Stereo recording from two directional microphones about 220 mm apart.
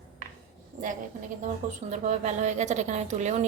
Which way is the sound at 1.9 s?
30° right (ahead or behind).